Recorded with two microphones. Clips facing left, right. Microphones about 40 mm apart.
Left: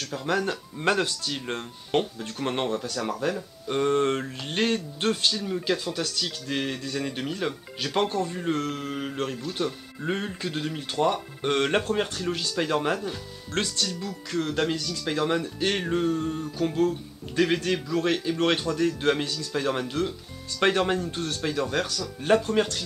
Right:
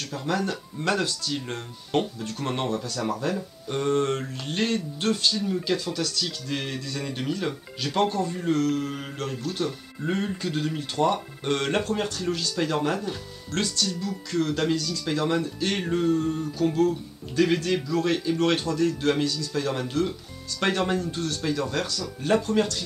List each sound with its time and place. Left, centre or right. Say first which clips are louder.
0.3 s speech: left 1 dB; left
3.6 s speech: left 1 dB; left
5.4 s speech: right 1 dB; centre
5.9 s speech: right 1 dB; left
6.2 s speech: left 1 dB; centre
11.4 s speech: left 2 dB; left